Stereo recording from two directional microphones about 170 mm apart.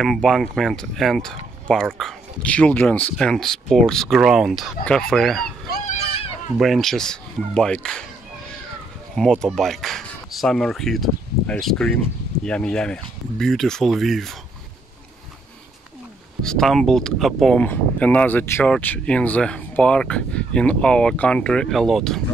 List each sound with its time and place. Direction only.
0.0 s speech: centre (ahead or behind)
5.7 s a sound: 65° left (ahead or behind)
6.6 s speech: centre (ahead or behind)
9.1 s speech: centre (ahead or behind)
16.4 s speech: 5° left (ahead or behind)